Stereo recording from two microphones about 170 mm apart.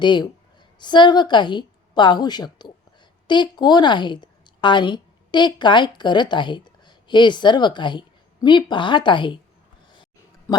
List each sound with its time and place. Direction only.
0.0 s a woman's voice: 25° left (ahead or behind)